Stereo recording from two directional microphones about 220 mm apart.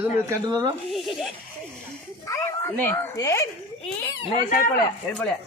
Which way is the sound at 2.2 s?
10° left (ahead or behind).